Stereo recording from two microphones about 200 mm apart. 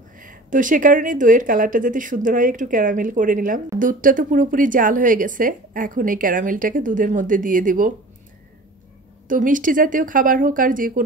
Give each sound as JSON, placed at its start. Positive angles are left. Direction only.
{"t": 0.2, "sound": "speech", "side_deg": -40}
{"t": 9.3, "sound": "speech", "side_deg": -40}